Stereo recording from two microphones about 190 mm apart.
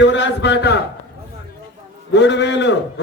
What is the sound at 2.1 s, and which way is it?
Speech, 65° left (ahead or behind).